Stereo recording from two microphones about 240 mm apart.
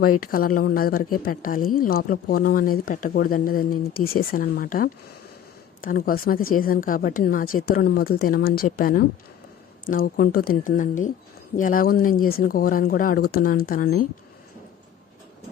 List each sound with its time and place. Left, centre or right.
0.2 s a woman's voice: left